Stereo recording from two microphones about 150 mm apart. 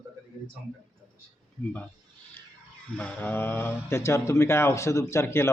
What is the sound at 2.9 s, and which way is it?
Speech, 10° left (ahead or behind).